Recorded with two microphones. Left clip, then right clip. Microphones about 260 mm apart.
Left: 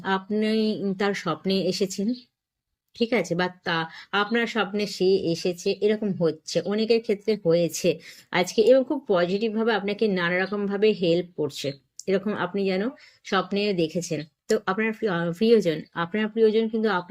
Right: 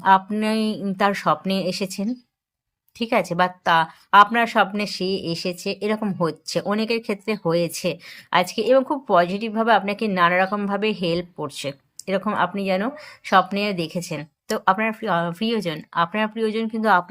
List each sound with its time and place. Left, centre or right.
0.0 s speech: centre